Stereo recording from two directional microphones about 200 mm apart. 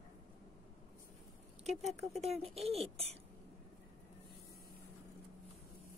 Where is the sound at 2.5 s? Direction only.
30° right (ahead or behind).